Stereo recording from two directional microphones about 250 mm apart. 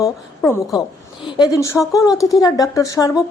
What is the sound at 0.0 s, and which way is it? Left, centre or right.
Speech, centre.